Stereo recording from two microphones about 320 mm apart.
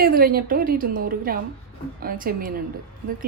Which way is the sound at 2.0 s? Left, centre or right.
Right.